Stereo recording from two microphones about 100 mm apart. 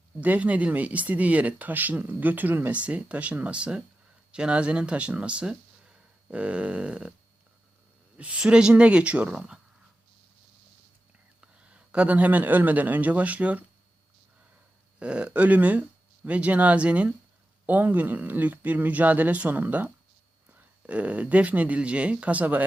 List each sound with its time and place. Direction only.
0.2 s speech: 15° right (ahead or behind)
8.1 s speech: 10° right (ahead or behind)
11.3 s a man's voice: 10° right (ahead or behind)
14.9 s speech: 10° right (ahead or behind)